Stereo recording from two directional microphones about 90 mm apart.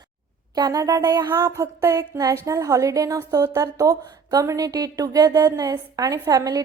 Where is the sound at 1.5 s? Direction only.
25° right (ahead or behind).